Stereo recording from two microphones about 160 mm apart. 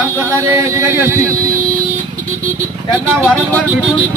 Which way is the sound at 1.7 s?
55° right (ahead or behind).